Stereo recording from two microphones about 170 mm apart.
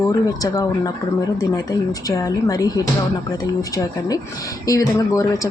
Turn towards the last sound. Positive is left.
turn(degrees=20)  # may be behind; listen again after turning